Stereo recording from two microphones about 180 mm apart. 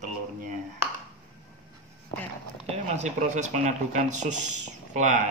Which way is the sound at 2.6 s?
40° right (ahead or behind).